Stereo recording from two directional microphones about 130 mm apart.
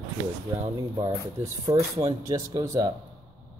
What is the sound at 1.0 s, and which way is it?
Speech, 25° right (ahead or behind).